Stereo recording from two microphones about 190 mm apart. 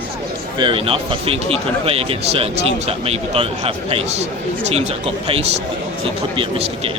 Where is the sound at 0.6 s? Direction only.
30° right (ahead or behind).